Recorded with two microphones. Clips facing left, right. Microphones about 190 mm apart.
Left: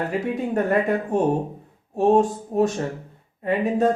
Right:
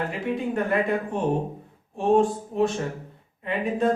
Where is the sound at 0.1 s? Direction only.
40° left (ahead or behind).